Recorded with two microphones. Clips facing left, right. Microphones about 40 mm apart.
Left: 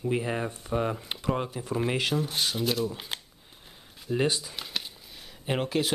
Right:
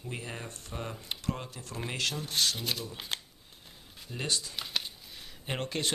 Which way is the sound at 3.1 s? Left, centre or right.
Centre.